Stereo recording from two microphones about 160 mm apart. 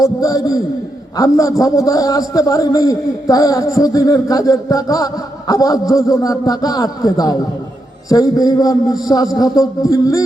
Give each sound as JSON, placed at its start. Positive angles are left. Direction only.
{"t": 0.0, "sound": "a man's voice", "side_deg": 20}